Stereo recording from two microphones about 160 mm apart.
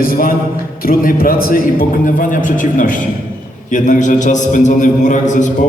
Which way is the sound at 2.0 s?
55° left (ahead or behind).